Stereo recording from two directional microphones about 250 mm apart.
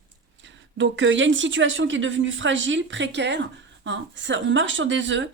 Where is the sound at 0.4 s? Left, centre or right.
Right.